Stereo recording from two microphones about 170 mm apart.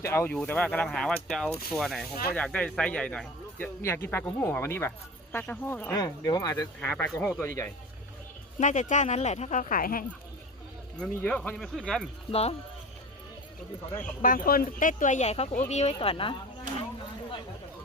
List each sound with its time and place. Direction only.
0.0 s speech: 15° left (ahead or behind)
5.9 s speech: 20° left (ahead or behind)
6.7 s speech: 5° left (ahead or behind)
8.5 s speech: 45° left (ahead or behind)
11.0 s speech: 10° left (ahead or behind)
12.3 s speech: 35° left (ahead or behind)
14.2 s speech: 55° left (ahead or behind); by 16.3 s 30° left (ahead or behind)